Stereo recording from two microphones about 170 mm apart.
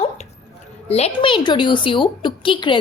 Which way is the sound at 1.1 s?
25° left (ahead or behind).